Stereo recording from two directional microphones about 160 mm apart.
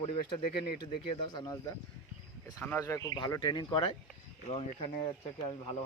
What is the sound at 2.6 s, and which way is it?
Speech, 15° left (ahead or behind).